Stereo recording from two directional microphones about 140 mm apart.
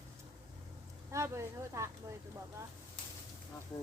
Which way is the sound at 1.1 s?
20° right (ahead or behind).